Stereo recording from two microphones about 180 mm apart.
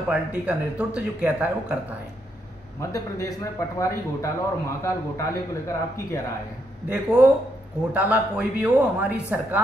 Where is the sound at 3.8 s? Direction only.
15° left (ahead or behind).